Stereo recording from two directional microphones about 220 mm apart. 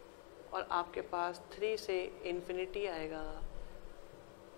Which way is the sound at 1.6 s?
15° left (ahead or behind).